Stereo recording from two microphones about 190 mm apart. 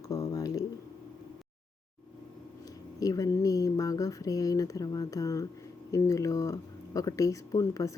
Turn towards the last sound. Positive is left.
turn(degrees=15)  # may be behind; listen again after turning